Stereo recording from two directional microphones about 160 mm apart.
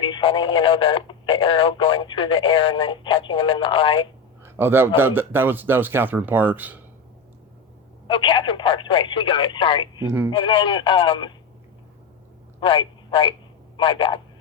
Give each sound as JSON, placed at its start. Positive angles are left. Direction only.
{"t": 0.0, "sound": "speech", "side_deg": 30}
{"t": 4.4, "sound": "a man's voice", "side_deg": -15}
{"t": 8.0, "sound": "speech", "side_deg": 30}
{"t": 12.5, "sound": "speech", "side_deg": 30}